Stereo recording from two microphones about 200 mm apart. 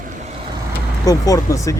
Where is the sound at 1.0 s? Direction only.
15° left (ahead or behind).